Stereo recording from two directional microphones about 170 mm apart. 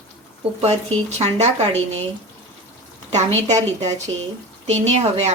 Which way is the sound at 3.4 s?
40° right (ahead or behind).